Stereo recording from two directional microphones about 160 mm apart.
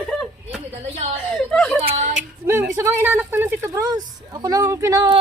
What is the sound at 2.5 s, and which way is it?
A woman's voice, 15° right (ahead or behind).